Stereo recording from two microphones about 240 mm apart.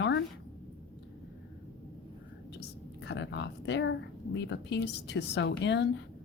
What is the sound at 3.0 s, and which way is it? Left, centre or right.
Speech, left.